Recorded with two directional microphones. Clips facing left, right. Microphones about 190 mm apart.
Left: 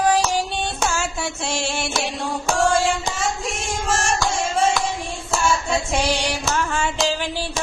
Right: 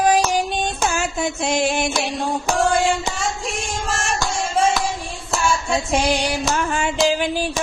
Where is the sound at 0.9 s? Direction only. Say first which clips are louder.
Right 3 dB; 20° right (ahead or behind).